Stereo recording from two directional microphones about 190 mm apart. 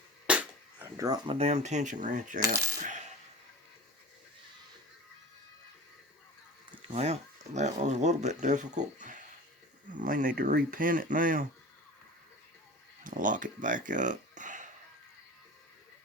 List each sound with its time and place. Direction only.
0.3 s cap gun: 5° right (ahead or behind)
0.9 s speech: 20° right (ahead or behind)
1.4 s speech: 35° right (ahead or behind)
2.8 s coin: 40° right (ahead or behind)
6.8 s speech: 35° right (ahead or behind)
13.1 s speech: 45° right (ahead or behind)